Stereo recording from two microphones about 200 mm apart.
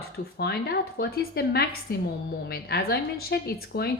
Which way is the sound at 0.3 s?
50° left (ahead or behind).